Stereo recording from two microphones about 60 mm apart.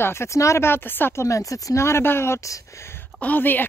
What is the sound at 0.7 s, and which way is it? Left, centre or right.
Speech, left.